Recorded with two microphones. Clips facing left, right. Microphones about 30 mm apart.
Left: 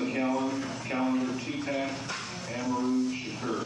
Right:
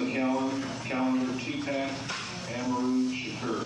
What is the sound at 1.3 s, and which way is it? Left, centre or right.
Speech, centre.